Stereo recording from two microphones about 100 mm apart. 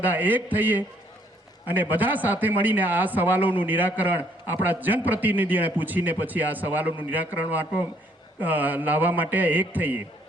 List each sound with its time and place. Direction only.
0.0 s speech: 20° right (ahead or behind)